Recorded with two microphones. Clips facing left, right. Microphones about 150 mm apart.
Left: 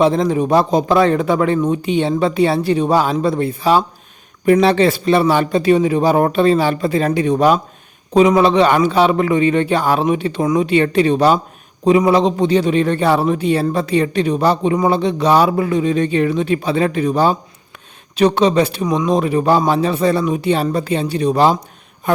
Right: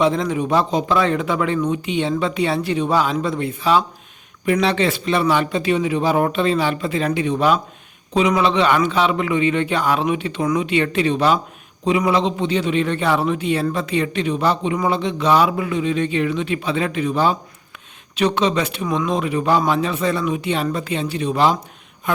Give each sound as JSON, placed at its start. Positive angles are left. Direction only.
{"t": 0.0, "sound": "speech", "side_deg": 35}